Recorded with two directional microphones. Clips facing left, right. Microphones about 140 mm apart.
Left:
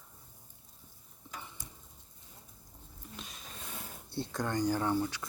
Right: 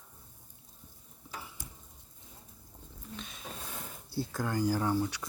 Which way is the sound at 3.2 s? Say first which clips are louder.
Right 2 dB; centre (ahead or behind).